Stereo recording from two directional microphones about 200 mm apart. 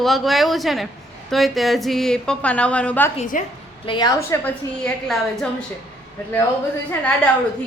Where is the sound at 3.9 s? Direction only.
20° left (ahead or behind); by 5.4 s 5° left (ahead or behind).